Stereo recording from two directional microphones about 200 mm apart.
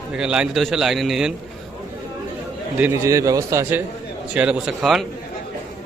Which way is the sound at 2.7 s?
10° right (ahead or behind).